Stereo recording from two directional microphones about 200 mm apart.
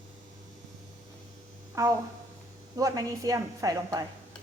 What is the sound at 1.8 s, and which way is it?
A woman's voice, 15° right (ahead or behind).